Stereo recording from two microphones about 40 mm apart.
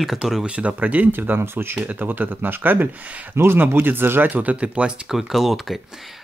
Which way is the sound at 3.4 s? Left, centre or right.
Right.